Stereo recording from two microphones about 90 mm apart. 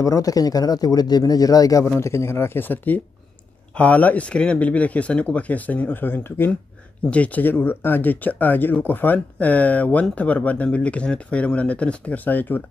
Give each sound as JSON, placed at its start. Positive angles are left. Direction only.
{"t": 0.0, "sound": "speech", "side_deg": 40}
{"t": 2.0, "sound": "speech", "side_deg": 30}